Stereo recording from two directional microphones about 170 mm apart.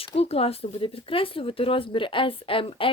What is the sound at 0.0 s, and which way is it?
Speech, 35° left (ahead or behind).